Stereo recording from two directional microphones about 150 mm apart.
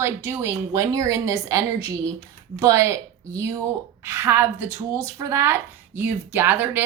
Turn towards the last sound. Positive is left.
turn(degrees=-15)  # may be behind; listen again after turning